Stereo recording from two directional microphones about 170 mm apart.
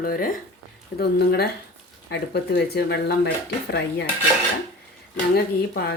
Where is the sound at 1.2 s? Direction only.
70° left (ahead or behind).